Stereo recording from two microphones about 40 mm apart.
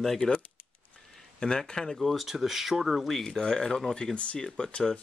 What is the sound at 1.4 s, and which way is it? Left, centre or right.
Speech, centre.